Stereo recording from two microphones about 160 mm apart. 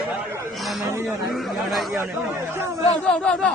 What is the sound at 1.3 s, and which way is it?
A man's voice, centre (ahead or behind).